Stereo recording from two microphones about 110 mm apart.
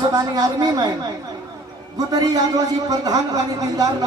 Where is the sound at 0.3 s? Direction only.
35° right (ahead or behind).